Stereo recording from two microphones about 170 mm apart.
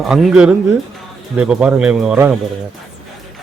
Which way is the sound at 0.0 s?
Centre (ahead or behind).